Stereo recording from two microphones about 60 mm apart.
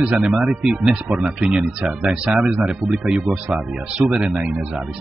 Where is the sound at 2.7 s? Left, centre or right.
Centre.